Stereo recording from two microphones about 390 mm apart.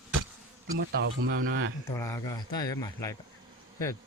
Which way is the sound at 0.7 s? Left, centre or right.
Right.